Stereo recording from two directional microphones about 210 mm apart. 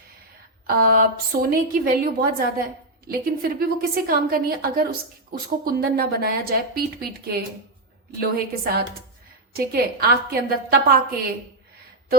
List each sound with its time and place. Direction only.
0.7 s a woman's voice: 45° right (ahead or behind)